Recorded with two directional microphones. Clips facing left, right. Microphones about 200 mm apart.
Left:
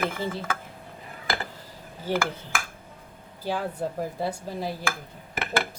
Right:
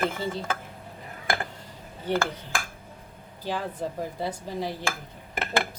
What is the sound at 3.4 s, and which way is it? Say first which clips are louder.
Speech: left 2 dB; 10° left (ahead or behind).